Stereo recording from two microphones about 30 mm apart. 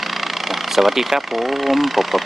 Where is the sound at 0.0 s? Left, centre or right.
Centre.